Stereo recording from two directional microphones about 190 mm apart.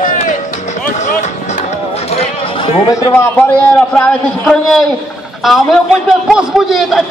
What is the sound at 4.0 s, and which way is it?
A man's voice, 5° left (ahead or behind).